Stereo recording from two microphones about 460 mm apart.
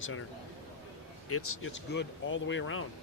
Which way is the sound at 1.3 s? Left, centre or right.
Left.